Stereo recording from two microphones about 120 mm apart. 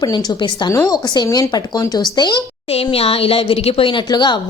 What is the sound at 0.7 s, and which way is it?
Speech, 25° left (ahead or behind).